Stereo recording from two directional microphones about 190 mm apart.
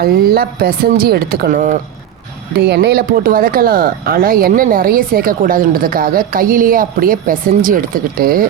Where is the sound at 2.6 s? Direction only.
60° right (ahead or behind).